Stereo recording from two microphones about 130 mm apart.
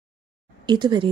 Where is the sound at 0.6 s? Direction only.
35° right (ahead or behind).